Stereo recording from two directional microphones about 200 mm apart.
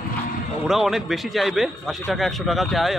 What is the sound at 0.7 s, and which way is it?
Speech, centre (ahead or behind).